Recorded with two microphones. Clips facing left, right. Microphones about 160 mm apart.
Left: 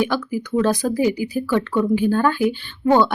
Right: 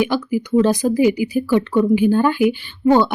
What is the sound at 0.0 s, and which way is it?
Speech, 10° right (ahead or behind).